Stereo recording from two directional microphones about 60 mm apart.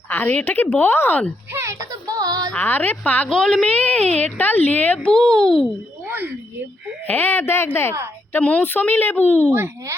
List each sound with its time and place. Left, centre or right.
0.1 s a woman's voice: left
1.8 s child singing: right
2.6 s a child's voice: left
3.2 s a child's voice: centre
3.7 s a child's voice: left
5.1 s a child's voice: centre
6.1 s a sound: right
7.1 s speech: left
8.4 s a child's voice: left
8.6 s speech: left